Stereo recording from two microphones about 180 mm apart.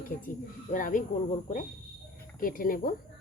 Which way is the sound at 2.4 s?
50° left (ahead or behind).